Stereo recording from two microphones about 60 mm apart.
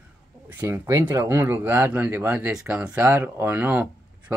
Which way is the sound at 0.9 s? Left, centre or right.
Right.